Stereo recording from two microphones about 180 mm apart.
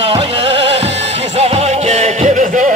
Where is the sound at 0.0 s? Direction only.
30° right (ahead or behind).